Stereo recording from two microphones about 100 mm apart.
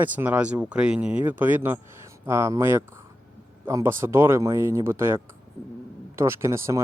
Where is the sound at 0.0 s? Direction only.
15° right (ahead or behind).